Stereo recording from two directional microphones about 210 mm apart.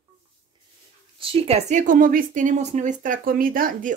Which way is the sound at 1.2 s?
30° right (ahead or behind).